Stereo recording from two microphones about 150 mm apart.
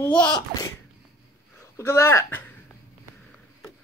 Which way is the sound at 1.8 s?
20° left (ahead or behind).